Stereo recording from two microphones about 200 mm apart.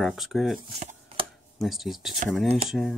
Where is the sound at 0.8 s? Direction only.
35° right (ahead or behind).